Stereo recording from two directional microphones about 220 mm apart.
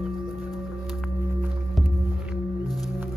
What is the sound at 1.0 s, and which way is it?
Singing bowl, 5° right (ahead or behind).